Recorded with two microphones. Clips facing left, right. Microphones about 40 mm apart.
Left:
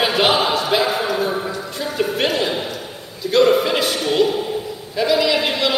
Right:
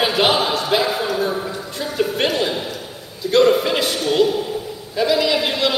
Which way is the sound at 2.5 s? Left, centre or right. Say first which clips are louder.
Left 1 dB; centre.